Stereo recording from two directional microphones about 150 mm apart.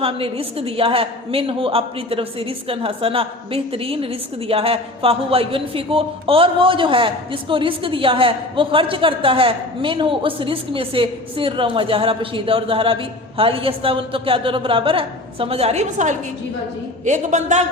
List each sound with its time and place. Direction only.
0.0 s a woman's voice: 40° right (ahead or behind)